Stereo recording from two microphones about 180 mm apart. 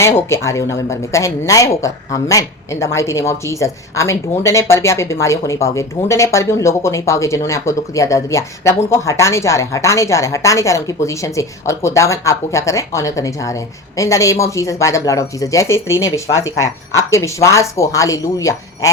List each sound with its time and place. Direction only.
0.0 s speech: 15° left (ahead or behind)